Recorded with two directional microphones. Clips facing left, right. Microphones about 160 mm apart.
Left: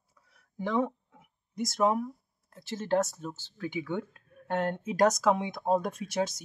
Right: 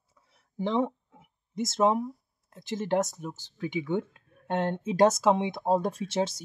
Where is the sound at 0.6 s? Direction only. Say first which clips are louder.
Right 2 dB; 25° right (ahead or behind).